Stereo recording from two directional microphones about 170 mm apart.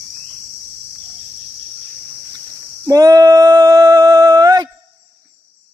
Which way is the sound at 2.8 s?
20° right (ahead or behind).